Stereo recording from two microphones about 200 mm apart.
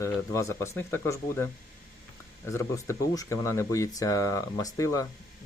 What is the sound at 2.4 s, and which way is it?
Speech, 15° left (ahead or behind).